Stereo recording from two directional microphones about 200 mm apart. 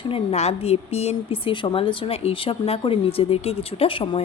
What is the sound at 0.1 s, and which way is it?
A woman's voice, 30° left (ahead or behind).